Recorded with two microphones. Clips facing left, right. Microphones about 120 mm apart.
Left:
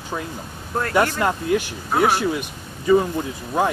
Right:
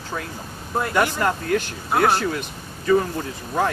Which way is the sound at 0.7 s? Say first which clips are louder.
Left 1 dB; 10° right (ahead or behind).